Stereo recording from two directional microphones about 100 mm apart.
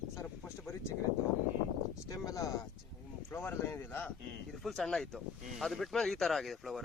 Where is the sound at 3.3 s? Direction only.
20° left (ahead or behind).